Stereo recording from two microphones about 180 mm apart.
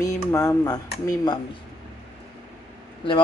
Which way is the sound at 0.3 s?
15° left (ahead or behind).